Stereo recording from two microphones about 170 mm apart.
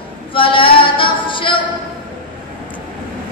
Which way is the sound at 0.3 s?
30° left (ahead or behind).